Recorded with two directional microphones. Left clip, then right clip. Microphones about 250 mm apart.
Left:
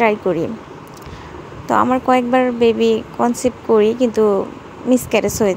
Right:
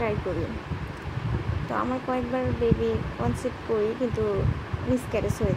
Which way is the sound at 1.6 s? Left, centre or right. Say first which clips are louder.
Left 14 dB; left.